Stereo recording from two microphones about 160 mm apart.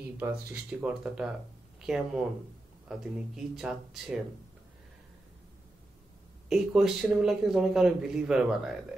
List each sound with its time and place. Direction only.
0.5 s speech: 10° right (ahead or behind)
6.5 s speech: 5° right (ahead or behind)